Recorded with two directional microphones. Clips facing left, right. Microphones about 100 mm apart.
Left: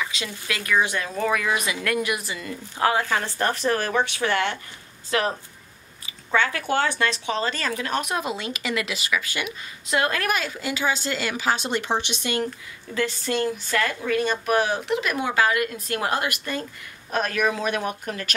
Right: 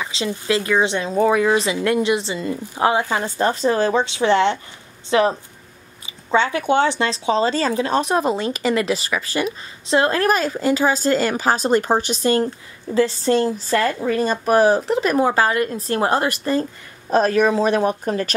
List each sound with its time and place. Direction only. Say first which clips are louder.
0.0 s speech: right 6 dB; 30° right (ahead or behind)
6.0 s a sound: right 4 dB; 20° right (ahead or behind)
6.7 s speech: right 6 dB; 20° right (ahead or behind)